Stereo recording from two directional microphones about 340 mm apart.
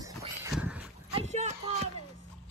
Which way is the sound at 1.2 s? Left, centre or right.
Centre.